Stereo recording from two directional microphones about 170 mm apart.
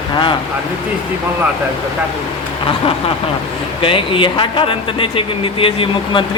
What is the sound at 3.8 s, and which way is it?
Speech, 30° left (ahead or behind).